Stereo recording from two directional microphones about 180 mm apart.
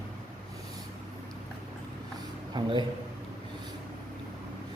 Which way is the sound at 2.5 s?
20° right (ahead or behind).